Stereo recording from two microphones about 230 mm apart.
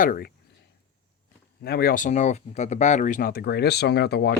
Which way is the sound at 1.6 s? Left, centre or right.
Left.